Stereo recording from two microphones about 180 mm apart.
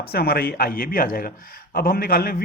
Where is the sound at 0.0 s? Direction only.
60° left (ahead or behind).